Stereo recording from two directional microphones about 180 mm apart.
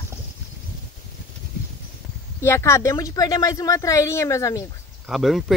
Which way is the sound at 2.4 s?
15° left (ahead or behind).